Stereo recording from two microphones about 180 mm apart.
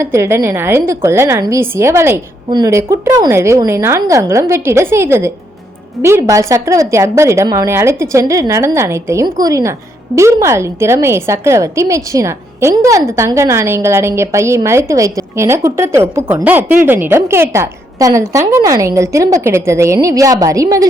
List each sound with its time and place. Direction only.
0.0 s a woman's voice: 15° right (ahead or behind)